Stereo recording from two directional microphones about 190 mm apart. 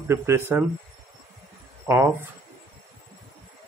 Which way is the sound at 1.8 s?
15° right (ahead or behind).